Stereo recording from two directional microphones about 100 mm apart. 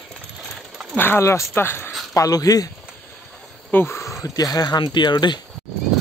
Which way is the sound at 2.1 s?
35° left (ahead or behind).